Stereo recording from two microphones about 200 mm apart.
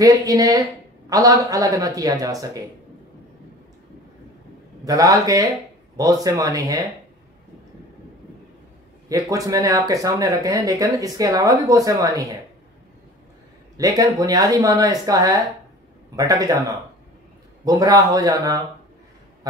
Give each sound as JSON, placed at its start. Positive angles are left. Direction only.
{"t": 0.0, "sound": "speech", "side_deg": -15}
{"t": 4.8, "sound": "speech", "side_deg": -15}
{"t": 9.1, "sound": "speech", "side_deg": -15}
{"t": 13.7, "sound": "a man's voice", "side_deg": -15}